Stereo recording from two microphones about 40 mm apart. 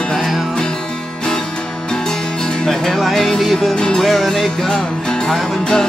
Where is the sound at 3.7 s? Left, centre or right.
Centre.